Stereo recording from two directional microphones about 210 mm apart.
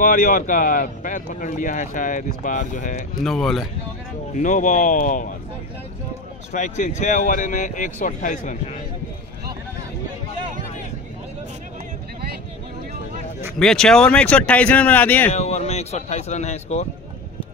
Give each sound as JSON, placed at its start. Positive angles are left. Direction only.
{"t": 0.0, "sound": "speech", "side_deg": 40}
{"t": 3.2, "sound": "speech", "side_deg": 0}
{"t": 4.3, "sound": "speech", "side_deg": 35}
{"t": 6.5, "sound": "speech", "side_deg": 35}
{"t": 13.6, "sound": "speech", "side_deg": 0}
{"t": 15.3, "sound": "speech", "side_deg": 30}